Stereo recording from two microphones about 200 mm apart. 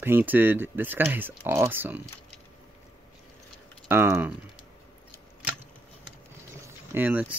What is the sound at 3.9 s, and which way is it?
Speech, 10° right (ahead or behind).